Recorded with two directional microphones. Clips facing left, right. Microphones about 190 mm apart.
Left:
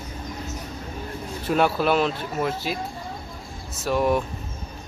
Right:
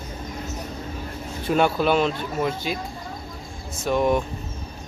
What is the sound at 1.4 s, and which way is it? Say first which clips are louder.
Speech: right 1 dB; centre (ahead or behind).